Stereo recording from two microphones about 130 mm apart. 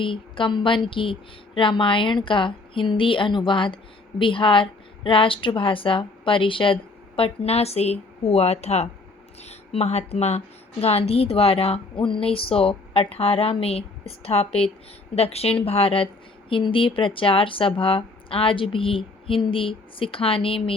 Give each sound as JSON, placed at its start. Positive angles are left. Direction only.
{"t": 0.0, "sound": "a woman's voice", "side_deg": 40}